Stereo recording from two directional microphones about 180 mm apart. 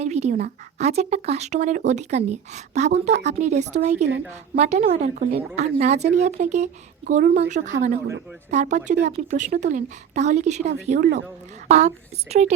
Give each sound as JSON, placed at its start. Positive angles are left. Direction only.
{"t": 0.0, "sound": "speech", "side_deg": -40}